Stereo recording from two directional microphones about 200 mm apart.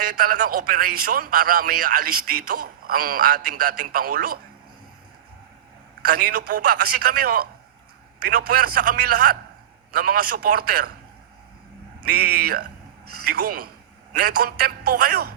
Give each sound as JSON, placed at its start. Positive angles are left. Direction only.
{"t": 0.0, "sound": "speech", "side_deg": -45}
{"t": 6.1, "sound": "speech", "side_deg": -45}
{"t": 12.1, "sound": "speech", "side_deg": -50}